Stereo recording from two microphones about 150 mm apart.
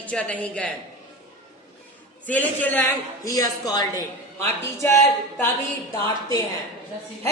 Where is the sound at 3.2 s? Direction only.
25° left (ahead or behind).